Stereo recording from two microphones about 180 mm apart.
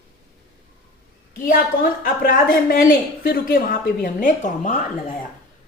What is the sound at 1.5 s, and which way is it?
A woman's voice, 55° left (ahead or behind).